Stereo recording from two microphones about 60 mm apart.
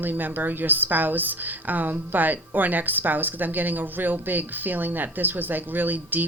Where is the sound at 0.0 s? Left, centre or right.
Right.